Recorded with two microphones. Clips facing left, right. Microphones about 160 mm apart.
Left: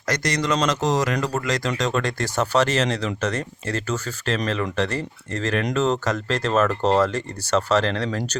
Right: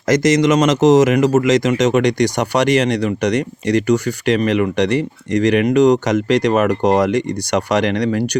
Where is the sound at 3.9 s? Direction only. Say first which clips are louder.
Right 10 dB; 15° right (ahead or behind).